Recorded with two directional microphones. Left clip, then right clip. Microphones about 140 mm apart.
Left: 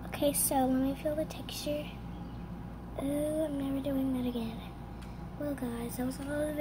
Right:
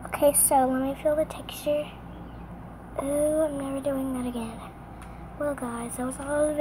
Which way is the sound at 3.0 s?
20° left (ahead or behind).